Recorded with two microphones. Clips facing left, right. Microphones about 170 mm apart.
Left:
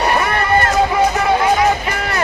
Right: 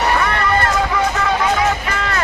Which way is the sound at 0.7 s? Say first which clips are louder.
Left 4 dB; 20° left (ahead or behind).